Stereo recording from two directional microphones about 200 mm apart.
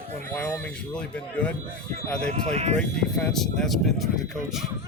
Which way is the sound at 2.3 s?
30° right (ahead or behind).